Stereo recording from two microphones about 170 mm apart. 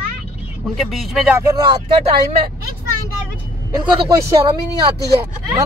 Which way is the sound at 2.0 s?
35° right (ahead or behind).